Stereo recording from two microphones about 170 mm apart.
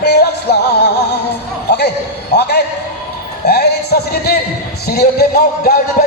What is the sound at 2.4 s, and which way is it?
Music, 75° left (ahead or behind).